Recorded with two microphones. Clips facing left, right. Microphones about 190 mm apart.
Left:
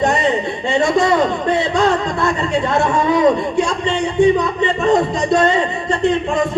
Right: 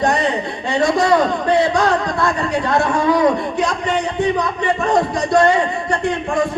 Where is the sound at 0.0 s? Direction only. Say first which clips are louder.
Left 1 dB; 25° left (ahead or behind).